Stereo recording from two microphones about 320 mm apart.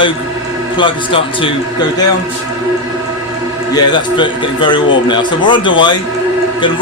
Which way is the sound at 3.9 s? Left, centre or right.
Centre.